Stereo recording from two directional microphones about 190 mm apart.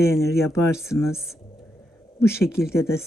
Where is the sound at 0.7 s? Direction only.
Centre (ahead or behind).